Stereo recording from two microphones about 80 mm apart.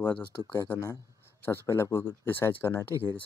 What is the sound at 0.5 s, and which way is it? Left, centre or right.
Speech, left.